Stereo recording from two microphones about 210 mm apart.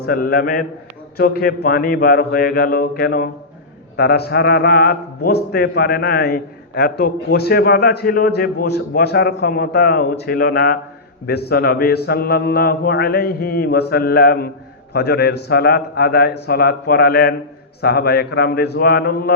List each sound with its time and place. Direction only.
0.0 s a man's voice: 45° left (ahead or behind)